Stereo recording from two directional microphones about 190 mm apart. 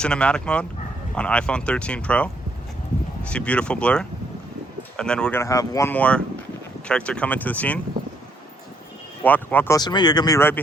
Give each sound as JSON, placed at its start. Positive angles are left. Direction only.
{"t": 0.0, "sound": "speech", "side_deg": 5}
{"t": 9.2, "sound": "speech", "side_deg": 10}